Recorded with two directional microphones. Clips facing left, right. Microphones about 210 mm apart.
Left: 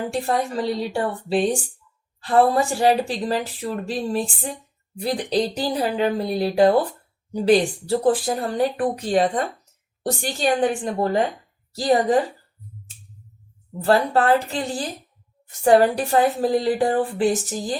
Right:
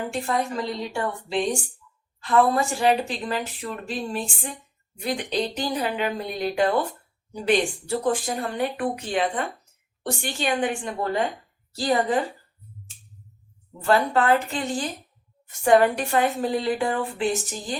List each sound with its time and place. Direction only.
0.1 s speech: 35° left (ahead or behind)
13.8 s speech: 35° left (ahead or behind)